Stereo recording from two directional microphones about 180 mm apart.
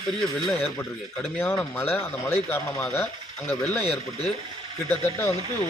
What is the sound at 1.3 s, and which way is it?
Speech, 10° left (ahead or behind).